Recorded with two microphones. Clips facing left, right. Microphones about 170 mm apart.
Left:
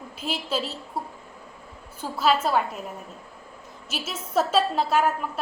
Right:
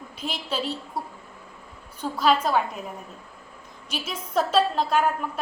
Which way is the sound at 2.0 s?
5° left (ahead or behind).